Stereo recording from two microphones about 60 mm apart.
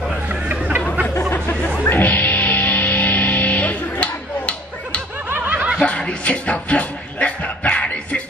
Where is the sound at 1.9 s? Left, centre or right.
Left.